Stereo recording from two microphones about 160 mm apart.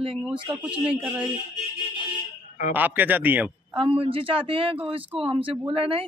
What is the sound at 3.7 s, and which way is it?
Speech, 35° right (ahead or behind).